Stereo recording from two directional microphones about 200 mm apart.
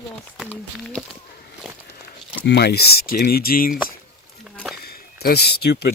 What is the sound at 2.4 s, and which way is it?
Speech, 55° left (ahead or behind).